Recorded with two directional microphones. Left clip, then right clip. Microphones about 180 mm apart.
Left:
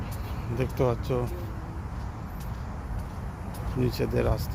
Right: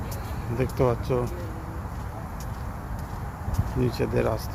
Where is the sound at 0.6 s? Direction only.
5° right (ahead or behind).